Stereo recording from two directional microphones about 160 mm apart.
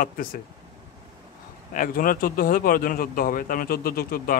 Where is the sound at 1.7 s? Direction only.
60° left (ahead or behind).